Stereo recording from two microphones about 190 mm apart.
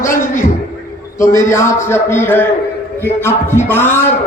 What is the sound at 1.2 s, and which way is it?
A man's voice, 15° left (ahead or behind).